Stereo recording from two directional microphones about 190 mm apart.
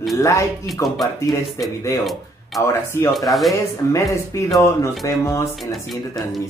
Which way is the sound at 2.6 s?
10° left (ahead or behind).